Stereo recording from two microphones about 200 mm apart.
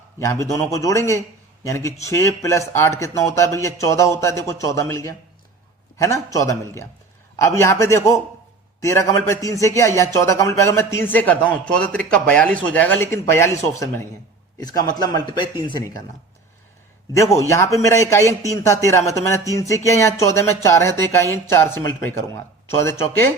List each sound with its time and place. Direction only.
0.2 s a man's voice: 15° left (ahead or behind)
15.0 s a man's voice: 20° left (ahead or behind)
17.2 s speech: 15° left (ahead or behind)